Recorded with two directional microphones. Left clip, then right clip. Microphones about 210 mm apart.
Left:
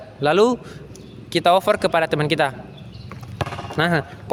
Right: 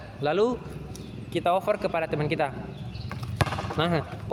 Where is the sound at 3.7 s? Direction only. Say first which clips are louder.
Left 9 dB; 50° left (ahead or behind).